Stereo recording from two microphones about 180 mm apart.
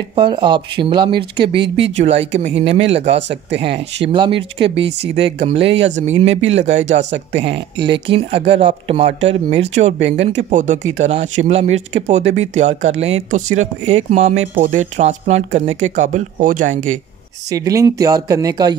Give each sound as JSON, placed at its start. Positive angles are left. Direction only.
{"t": 0.1, "sound": "speech", "side_deg": -25}
{"t": 3.2, "sound": "speech", "side_deg": -75}
{"t": 4.1, "sound": "speech", "side_deg": -30}
{"t": 17.5, "sound": "speech", "side_deg": -20}